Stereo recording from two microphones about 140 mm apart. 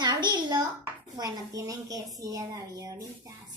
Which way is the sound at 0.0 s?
30° right (ahead or behind).